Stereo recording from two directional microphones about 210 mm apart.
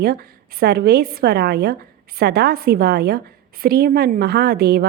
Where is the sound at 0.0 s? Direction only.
45° right (ahead or behind).